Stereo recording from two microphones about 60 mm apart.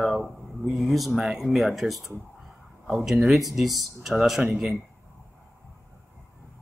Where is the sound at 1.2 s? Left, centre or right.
Centre.